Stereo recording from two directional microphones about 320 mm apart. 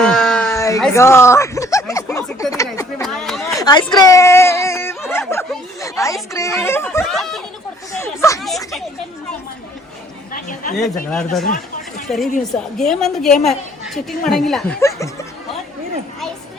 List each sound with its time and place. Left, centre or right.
0.0 s a sound: centre
7.9 s speech: centre
10.3 s speech: left
11.1 s speech: centre
11.4 s chatter: left
12.0 s speech: centre